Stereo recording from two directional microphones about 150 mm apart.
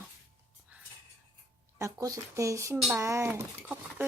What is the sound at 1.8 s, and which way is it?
Speech, 20° right (ahead or behind).